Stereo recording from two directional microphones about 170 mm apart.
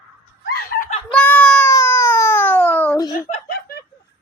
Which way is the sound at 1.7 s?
15° left (ahead or behind).